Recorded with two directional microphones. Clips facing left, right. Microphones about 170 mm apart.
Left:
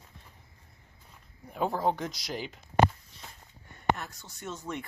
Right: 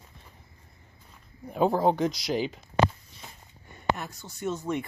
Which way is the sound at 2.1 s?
85° right.